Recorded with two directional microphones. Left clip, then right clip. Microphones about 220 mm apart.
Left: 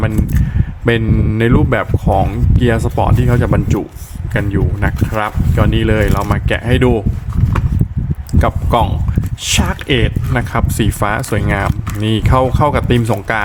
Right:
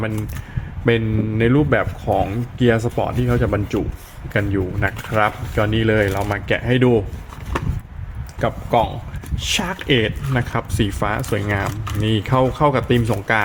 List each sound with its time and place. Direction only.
0.9 s speech: 15° left (ahead or behind)
8.3 s speech: 20° left (ahead or behind)